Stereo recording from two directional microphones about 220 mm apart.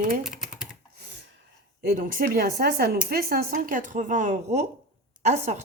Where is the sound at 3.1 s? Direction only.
45° right (ahead or behind).